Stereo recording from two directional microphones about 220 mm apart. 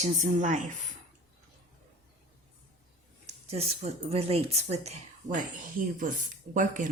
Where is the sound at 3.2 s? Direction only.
30° right (ahead or behind).